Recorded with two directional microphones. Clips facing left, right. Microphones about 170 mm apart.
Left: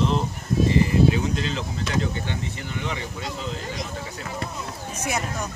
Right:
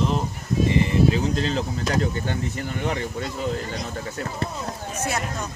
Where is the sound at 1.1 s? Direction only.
35° right (ahead or behind).